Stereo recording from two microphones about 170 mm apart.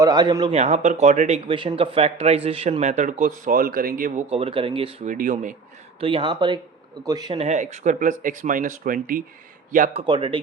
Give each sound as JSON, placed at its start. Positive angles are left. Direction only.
{"t": 0.0, "sound": "speech", "side_deg": -25}
{"t": 0.5, "sound": "speech", "side_deg": -45}
{"t": 1.5, "sound": "speech", "side_deg": -30}
{"t": 4.3, "sound": "speech", "side_deg": -30}
{"t": 5.0, "sound": "speech", "side_deg": -50}
{"t": 6.0, "sound": "speech", "side_deg": -30}
{"t": 7.3, "sound": "speech", "side_deg": -40}
{"t": 9.9, "sound": "speech", "side_deg": -30}